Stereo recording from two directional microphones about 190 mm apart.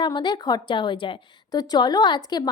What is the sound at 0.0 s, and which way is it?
A woman's voice, 25° left (ahead or behind).